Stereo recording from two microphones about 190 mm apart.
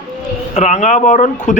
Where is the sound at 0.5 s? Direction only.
35° left (ahead or behind).